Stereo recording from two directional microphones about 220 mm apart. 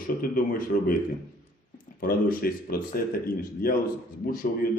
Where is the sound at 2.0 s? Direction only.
40° left (ahead or behind).